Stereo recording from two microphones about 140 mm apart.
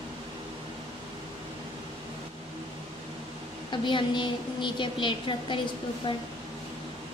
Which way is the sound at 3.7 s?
35° left (ahead or behind).